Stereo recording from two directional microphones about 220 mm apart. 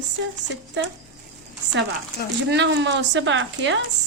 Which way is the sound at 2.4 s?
50° right (ahead or behind).